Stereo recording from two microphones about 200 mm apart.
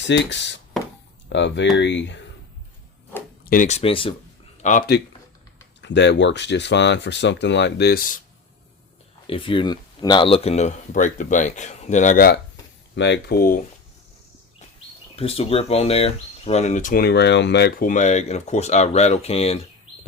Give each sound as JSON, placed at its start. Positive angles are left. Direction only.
{"t": 0.0, "sound": "speech", "side_deg": 65}
{"t": 3.5, "sound": "speech", "side_deg": 40}
{"t": 4.6, "sound": "speech", "side_deg": 45}
{"t": 5.8, "sound": "speech", "side_deg": 60}
{"t": 9.2, "sound": "speech", "side_deg": 25}
{"t": 13.0, "sound": "speech", "side_deg": 60}
{"t": 15.1, "sound": "speech", "side_deg": 30}